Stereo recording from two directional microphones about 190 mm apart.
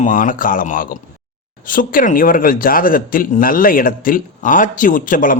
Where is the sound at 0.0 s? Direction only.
45° left (ahead or behind).